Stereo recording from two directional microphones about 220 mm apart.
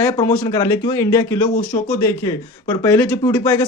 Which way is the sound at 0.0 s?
15° left (ahead or behind).